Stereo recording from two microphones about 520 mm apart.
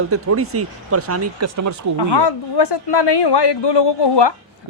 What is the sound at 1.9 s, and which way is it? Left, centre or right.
A woman's voice, left.